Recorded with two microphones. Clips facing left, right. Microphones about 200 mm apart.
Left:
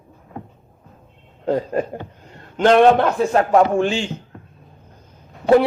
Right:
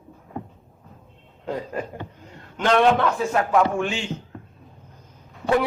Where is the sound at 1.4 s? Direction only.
35° left (ahead or behind).